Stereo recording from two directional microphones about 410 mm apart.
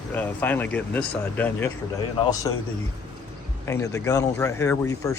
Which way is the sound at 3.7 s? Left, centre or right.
Centre.